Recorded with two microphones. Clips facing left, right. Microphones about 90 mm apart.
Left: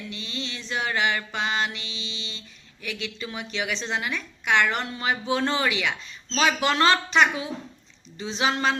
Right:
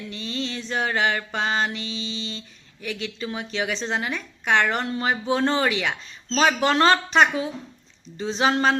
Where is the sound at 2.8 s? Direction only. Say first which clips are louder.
Right 3 dB; 35° right (ahead or behind).